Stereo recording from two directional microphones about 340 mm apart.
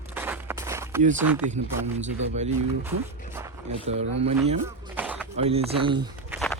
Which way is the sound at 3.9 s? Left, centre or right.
Centre.